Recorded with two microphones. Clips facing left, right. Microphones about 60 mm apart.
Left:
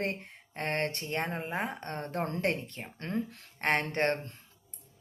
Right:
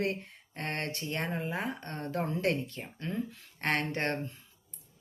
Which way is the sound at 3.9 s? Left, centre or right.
Left.